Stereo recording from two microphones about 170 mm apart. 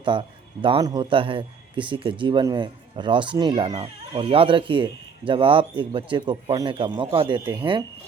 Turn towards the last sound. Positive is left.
turn(degrees=-25)  # may be behind; listen again after turning